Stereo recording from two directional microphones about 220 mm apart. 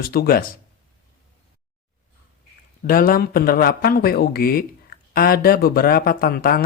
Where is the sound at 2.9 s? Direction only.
40° left (ahead or behind).